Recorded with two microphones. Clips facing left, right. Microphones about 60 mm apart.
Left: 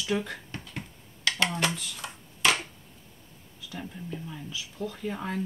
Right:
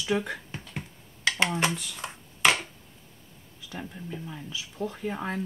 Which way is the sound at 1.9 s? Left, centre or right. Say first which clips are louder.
Right 2 dB; right.